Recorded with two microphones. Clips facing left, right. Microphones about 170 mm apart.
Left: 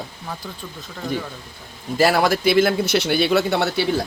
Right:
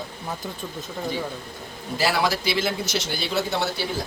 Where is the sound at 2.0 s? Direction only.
50° left (ahead or behind).